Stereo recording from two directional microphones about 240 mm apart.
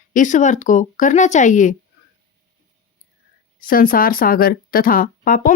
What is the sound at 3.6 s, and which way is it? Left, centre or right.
Speech, left.